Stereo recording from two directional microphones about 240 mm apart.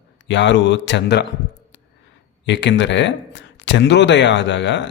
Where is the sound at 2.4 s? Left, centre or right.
Left.